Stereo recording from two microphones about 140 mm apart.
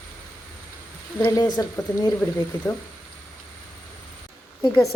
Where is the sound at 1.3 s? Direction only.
25° left (ahead or behind).